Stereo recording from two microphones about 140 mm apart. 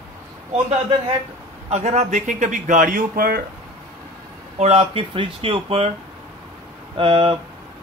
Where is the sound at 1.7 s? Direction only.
50° right (ahead or behind); by 3.4 s 90° right.